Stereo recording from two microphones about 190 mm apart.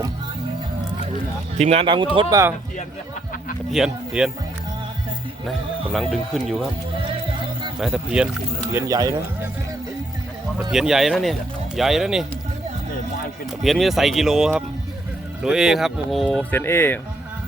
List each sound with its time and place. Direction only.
1.5 s speech: 35° right (ahead or behind); by 2.5 s 20° right (ahead or behind)
3.7 s speech: 5° right (ahead or behind)
5.5 s speech: centre (ahead or behind)
7.8 s speech: 5° right (ahead or behind)
8.7 s speech: 20° right (ahead or behind)
10.7 s speech: centre (ahead or behind)
13.6 s speech: centre (ahead or behind)